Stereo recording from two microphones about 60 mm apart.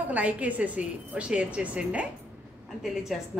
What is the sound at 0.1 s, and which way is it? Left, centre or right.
A woman's voice, right.